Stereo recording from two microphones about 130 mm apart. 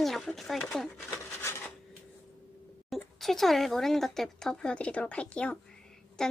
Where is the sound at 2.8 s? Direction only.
Centre (ahead or behind).